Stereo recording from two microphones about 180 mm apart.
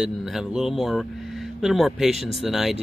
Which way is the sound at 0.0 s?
5° right (ahead or behind).